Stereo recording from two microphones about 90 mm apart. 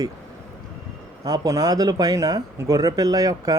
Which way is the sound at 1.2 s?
45° right (ahead or behind).